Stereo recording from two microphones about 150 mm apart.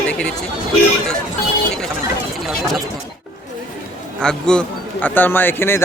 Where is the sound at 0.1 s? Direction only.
5° left (ahead or behind).